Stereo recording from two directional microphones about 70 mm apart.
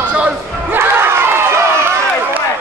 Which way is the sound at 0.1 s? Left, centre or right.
Centre.